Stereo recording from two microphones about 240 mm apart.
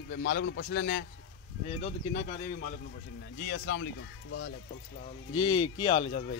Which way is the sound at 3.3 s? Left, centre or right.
Left.